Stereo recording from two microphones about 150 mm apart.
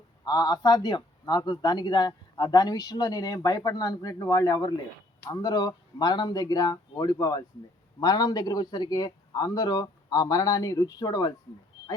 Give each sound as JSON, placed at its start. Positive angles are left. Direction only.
{"t": 0.3, "sound": "speech", "side_deg": 25}